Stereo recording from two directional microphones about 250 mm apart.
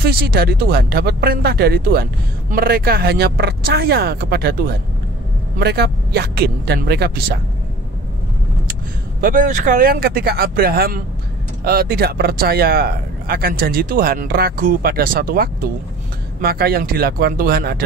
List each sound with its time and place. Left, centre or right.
0.0 s speech: right
9.2 s speech: right